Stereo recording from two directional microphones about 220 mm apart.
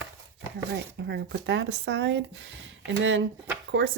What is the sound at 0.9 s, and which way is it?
Speech, 50° right (ahead or behind).